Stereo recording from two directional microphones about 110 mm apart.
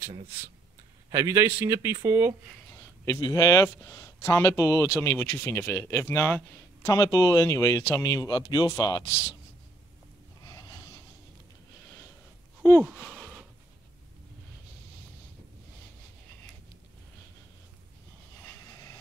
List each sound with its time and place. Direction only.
0.0 s speech: 60° right (ahead or behind)
1.1 s a man's voice: 25° right (ahead or behind)
3.1 s speech: 35° left (ahead or behind)
6.9 s speech: 35° left (ahead or behind)
10.4 s gasp: 30° left (ahead or behind)
13.0 s a sound: 10° left (ahead or behind)
18.4 s vehicle: 25° left (ahead or behind)